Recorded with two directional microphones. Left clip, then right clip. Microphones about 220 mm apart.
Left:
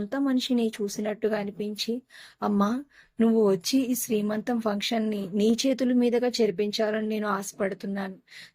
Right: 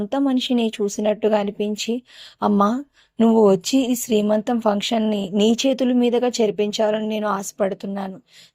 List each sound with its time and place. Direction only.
0.1 s speech: 25° right (ahead or behind)